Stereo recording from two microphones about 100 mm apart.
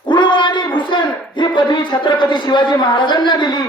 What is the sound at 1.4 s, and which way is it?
A man's voice, 50° left (ahead or behind).